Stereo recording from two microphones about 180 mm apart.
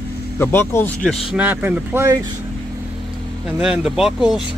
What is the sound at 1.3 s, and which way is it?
Speech, 10° right (ahead or behind).